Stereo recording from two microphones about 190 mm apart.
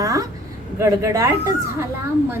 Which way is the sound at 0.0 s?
15° right (ahead or behind).